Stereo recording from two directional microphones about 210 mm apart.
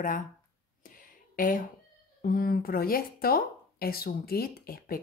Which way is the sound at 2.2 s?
45° left (ahead or behind).